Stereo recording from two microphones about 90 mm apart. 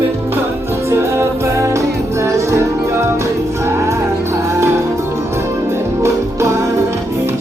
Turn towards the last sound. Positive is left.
turn(degrees=-35)  # may be behind; listen again after turning